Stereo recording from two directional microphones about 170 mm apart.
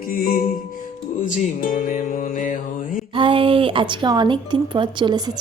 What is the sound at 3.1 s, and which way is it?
Speech, 30° right (ahead or behind).